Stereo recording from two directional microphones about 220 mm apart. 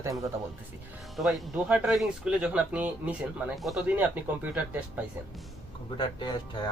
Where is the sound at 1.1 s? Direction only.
Centre (ahead or behind).